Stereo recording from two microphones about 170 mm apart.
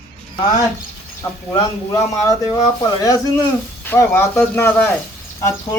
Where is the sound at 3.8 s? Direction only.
15° left (ahead or behind).